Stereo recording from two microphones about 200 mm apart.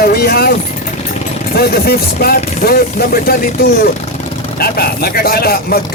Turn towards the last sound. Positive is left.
turn(degrees=50)  # may be behind; listen again after turning